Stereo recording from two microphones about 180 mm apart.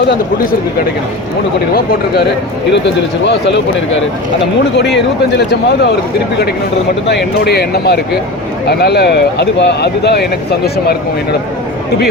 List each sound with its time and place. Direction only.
2.7 s speech: 75° left (ahead or behind)
5.4 s speech: 70° left (ahead or behind)
7.4 s speech: 60° left (ahead or behind)